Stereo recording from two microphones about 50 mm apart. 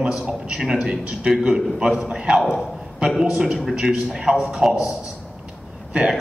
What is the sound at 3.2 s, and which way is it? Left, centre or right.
A man's voice, centre.